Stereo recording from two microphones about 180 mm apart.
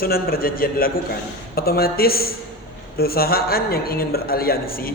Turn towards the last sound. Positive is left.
turn(degrees=55)  # may be behind; listen again after turning